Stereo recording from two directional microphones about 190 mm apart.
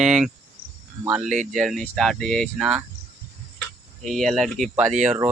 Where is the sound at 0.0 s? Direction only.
Centre (ahead or behind).